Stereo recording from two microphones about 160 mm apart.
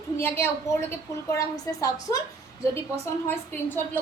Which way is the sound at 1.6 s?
20° left (ahead or behind).